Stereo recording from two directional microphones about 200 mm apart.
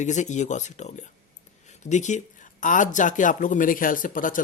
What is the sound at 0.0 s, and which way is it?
Speech, 35° left (ahead or behind).